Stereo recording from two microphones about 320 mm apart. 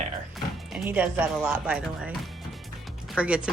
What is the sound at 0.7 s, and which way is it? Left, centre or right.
Speech, centre.